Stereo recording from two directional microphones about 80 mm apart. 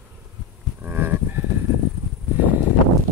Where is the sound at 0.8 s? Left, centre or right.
Right.